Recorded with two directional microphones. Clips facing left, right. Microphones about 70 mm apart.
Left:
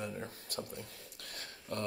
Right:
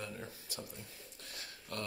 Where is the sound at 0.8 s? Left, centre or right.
Left.